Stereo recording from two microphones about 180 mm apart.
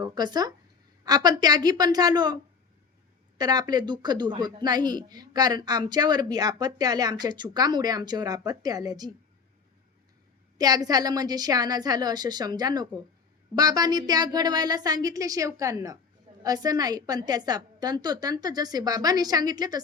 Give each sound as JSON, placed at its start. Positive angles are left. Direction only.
{"t": 0.0, "sound": "speech", "side_deg": -25}
{"t": 10.6, "sound": "speech", "side_deg": -20}